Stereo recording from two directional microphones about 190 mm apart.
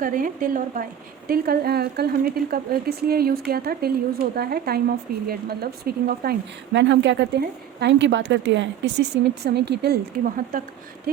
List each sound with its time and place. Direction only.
0.0 s a woman's voice: 45° right (ahead or behind)
6.7 s speech: 70° right (ahead or behind); by 10.6 s 50° right (ahead or behind)